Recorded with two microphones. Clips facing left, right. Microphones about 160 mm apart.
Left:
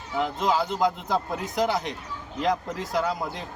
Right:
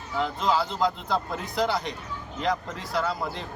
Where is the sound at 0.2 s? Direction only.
15° left (ahead or behind).